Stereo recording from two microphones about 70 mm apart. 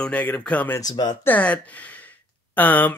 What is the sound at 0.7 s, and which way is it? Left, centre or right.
Speech, left.